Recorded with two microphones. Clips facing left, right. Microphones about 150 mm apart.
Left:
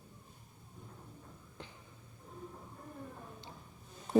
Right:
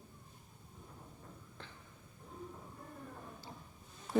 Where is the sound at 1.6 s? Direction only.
15° left (ahead or behind).